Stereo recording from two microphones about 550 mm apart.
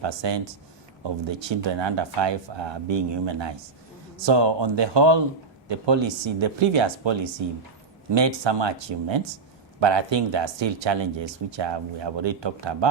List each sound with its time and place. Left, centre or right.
0.0 s speech: right